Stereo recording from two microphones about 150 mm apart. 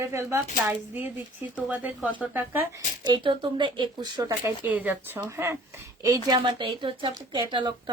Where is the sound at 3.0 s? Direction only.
30° right (ahead or behind).